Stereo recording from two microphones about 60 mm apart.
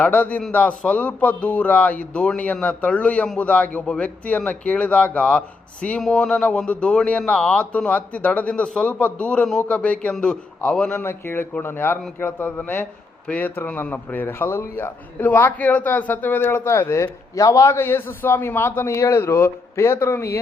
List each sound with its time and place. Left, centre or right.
0.0 s a man's voice: left
11.0 s a man's voice: left
16.9 s a man's voice: left
17.7 s a man's voice: left
18.9 s speech: left